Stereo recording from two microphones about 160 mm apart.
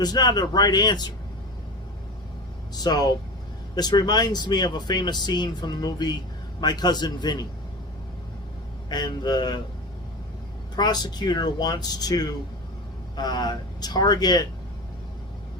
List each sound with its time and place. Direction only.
0.0 s speech: 25° left (ahead or behind)
2.7 s speech: 25° left (ahead or behind)
8.9 s speech: 25° left (ahead or behind)
10.8 s speech: 25° left (ahead or behind)